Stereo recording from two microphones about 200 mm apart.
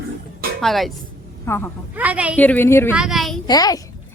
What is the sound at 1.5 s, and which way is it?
Speech, 15° left (ahead or behind).